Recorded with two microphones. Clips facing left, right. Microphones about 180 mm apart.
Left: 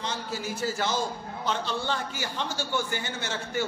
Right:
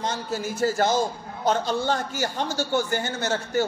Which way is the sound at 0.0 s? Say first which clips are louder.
Right 5 dB; 45° right (ahead or behind).